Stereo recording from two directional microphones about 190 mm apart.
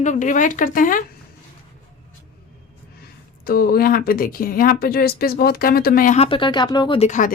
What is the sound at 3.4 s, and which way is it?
Speech, 50° left (ahead or behind).